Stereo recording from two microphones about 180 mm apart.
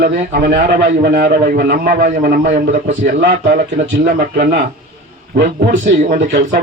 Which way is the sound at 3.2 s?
70° right (ahead or behind).